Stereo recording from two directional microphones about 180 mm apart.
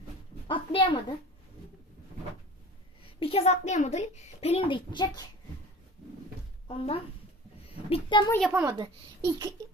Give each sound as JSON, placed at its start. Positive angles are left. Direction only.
{"t": 0.4, "sound": "a child's voice", "side_deg": 30}
{"t": 3.2, "sound": "a woman's voice", "side_deg": 35}
{"t": 6.7, "sound": "a woman's voice", "side_deg": 30}
{"t": 8.4, "sound": "a woman's voice", "side_deg": -5}
{"t": 8.6, "sound": "a child's voice", "side_deg": -20}